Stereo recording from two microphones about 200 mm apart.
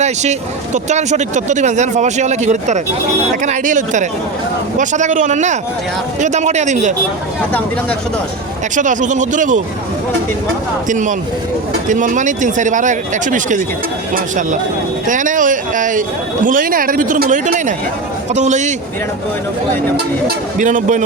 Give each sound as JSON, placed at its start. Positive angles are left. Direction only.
{"t": 0.0, "sound": "speech", "side_deg": -35}
{"t": 8.7, "sound": "speech", "side_deg": -40}
{"t": 10.8, "sound": "speech", "side_deg": -40}
{"t": 15.0, "sound": "speech", "side_deg": -40}
{"t": 20.2, "sound": "a man's voice", "side_deg": -40}